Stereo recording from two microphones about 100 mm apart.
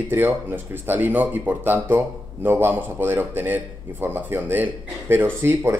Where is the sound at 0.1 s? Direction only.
20° right (ahead or behind).